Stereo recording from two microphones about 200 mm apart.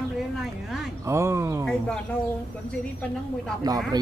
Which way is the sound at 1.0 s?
15° right (ahead or behind).